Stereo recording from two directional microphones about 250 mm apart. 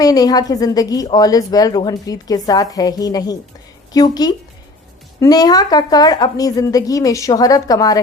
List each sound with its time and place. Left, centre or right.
0.0 s a woman's voice: centre